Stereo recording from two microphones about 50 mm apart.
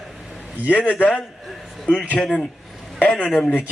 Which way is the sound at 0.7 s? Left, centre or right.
Left.